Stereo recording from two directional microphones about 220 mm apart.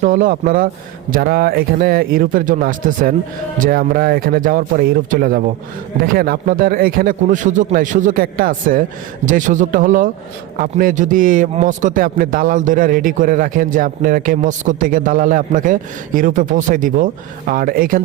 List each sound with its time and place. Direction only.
0.0 s a man's voice: 35° right (ahead or behind)